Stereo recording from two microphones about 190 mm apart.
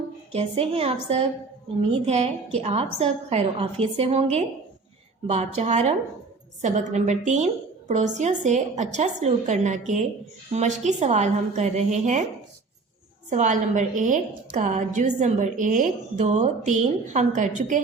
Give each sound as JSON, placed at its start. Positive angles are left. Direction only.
{"t": 0.3, "sound": "a woman's voice", "side_deg": -30}
{"t": 13.3, "sound": "a woman's voice", "side_deg": -40}